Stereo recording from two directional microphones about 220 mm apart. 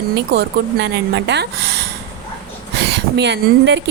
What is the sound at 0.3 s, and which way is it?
A woman's voice, 50° right (ahead or behind).